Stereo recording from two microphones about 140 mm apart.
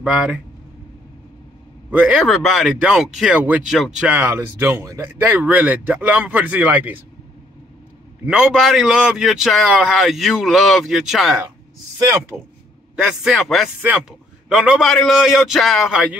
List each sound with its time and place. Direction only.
0.0 s a man's voice: 5° right (ahead or behind)
1.9 s speech: 10° right (ahead or behind)
2.2 s a man's voice: centre (ahead or behind)
8.3 s a man's voice: 5° right (ahead or behind)
12.0 s speech: 20° right (ahead or behind)
12.9 s a man's voice: 5° right (ahead or behind)